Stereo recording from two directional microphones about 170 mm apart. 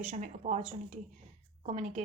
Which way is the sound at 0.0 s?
40° right (ahead or behind).